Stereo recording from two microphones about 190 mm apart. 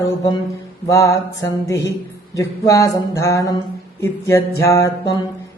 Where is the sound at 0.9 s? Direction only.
15° left (ahead or behind).